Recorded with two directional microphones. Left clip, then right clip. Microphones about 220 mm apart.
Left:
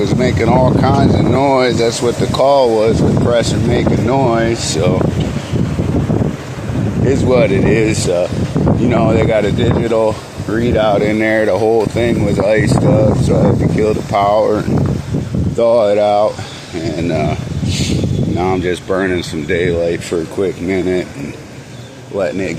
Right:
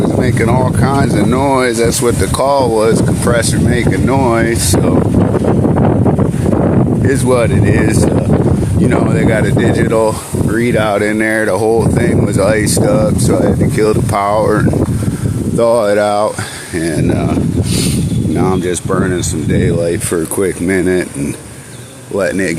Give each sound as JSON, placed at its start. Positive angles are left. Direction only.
{"t": 0.3, "sound": "speech", "side_deg": -45}
{"t": 7.1, "sound": "speech", "side_deg": -40}
{"t": 10.5, "sound": "speech", "side_deg": -50}
{"t": 13.7, "sound": "speech", "side_deg": -50}
{"t": 18.3, "sound": "speech", "side_deg": -40}
{"t": 18.9, "sound": "speech", "side_deg": -20}
{"t": 20.4, "sound": "speech", "side_deg": -40}